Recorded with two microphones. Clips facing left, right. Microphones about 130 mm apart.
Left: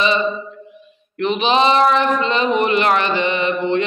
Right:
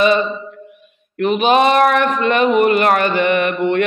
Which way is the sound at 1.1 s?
50° right (ahead or behind).